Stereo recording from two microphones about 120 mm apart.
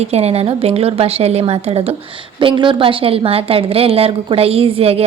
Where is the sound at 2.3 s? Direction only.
40° right (ahead or behind).